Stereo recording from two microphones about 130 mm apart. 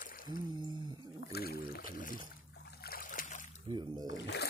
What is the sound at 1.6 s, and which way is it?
Boat, 90° left.